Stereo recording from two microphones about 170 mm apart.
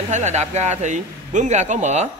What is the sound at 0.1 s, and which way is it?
Speech, 45° right (ahead or behind).